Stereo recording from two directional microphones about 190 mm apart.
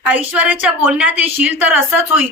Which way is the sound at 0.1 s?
10° right (ahead or behind).